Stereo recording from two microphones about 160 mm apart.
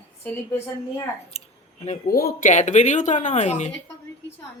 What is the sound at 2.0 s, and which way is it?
Speech, 70° left (ahead or behind).